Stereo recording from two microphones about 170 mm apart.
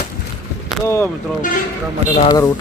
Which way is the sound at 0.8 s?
15° left (ahead or behind).